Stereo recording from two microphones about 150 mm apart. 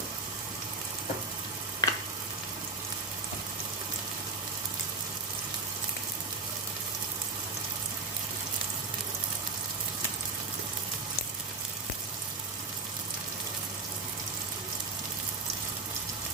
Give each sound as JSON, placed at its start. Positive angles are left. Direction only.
{"t": 1.8, "sound": "frying", "side_deg": 25}